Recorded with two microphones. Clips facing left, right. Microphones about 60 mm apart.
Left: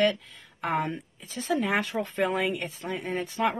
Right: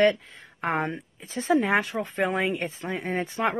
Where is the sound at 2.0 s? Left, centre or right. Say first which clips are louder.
Right 1 dB; centre.